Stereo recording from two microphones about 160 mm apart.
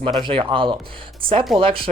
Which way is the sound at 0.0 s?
30° right (ahead or behind).